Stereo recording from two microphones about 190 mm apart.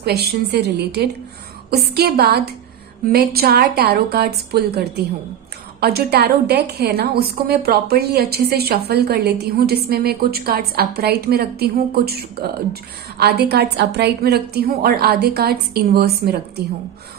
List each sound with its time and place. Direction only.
0.0 s a woman's voice: 60° right (ahead or behind)